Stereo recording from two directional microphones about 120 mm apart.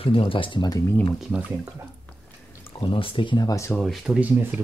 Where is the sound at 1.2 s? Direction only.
10° right (ahead or behind).